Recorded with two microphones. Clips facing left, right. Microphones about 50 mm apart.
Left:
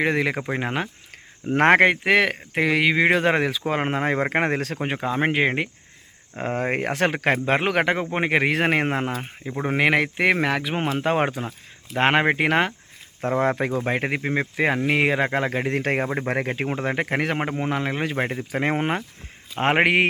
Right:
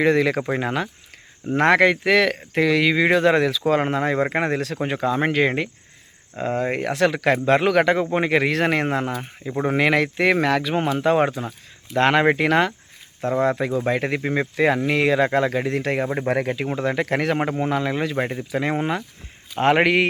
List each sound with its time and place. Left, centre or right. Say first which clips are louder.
0.0 s speech: right 4 dB; left
1.5 s speech: even; left
6.3 s speech: right 1 dB; left
13.2 s speech: right 1 dB; left
14.2 s speech: right 2 dB; centre; by 16.0 s left
16.0 s speech: right 3 dB; centre
16.6 s speech: right 2 dB; left